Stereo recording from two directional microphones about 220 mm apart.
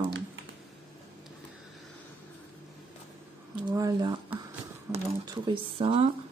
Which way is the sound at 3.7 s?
20° right (ahead or behind).